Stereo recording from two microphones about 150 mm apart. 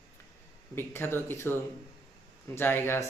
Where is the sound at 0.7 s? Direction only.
15° left (ahead or behind).